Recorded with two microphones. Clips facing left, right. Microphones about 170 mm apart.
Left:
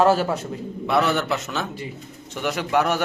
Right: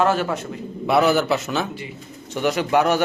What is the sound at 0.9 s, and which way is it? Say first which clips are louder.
A man's voice: right 4 dB; 5° right (ahead or behind).